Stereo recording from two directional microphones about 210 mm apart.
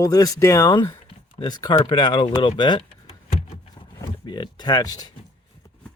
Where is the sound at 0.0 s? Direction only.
15° left (ahead or behind).